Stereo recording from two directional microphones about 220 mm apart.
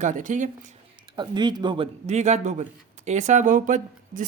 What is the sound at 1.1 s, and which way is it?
A man's voice, 20° right (ahead or behind).